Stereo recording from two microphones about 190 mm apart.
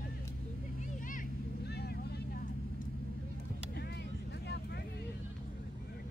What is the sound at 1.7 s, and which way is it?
Vehicle, 60° left (ahead or behind).